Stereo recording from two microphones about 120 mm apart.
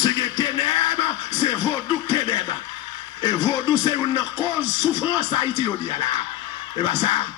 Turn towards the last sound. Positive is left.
turn(degrees=40)  # may be behind; listen again after turning